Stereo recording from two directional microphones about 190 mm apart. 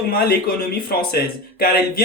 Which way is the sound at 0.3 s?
55° left (ahead or behind).